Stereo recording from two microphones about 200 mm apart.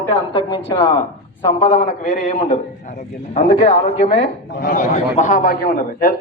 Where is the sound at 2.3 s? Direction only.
30° left (ahead or behind).